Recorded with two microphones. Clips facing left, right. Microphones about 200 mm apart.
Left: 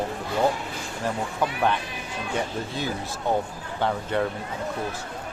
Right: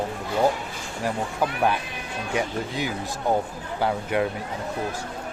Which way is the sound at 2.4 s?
15° right (ahead or behind).